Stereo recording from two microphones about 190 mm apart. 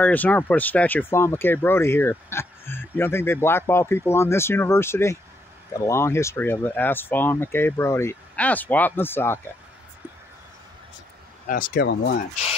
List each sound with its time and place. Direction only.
0.0 s speech: 10° left (ahead or behind)
11.4 s speech: 45° left (ahead or behind); by 12.2 s 60° left (ahead or behind)